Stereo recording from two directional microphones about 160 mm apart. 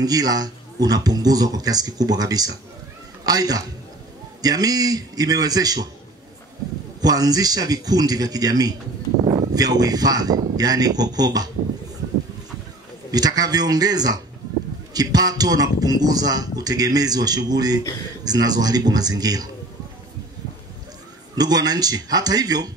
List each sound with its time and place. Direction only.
0.0 s speech: 25° right (ahead or behind)
7.0 s speech: 25° right (ahead or behind)
13.1 s speech: 25° right (ahead or behind)
21.4 s speech: 25° right (ahead or behind)